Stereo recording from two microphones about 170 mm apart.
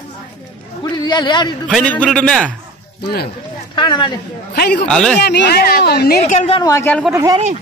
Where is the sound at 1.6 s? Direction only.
5° left (ahead or behind).